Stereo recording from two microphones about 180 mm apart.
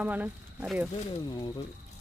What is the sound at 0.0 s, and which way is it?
Speech, 10° right (ahead or behind).